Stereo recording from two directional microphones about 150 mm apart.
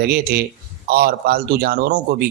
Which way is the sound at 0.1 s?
90° right.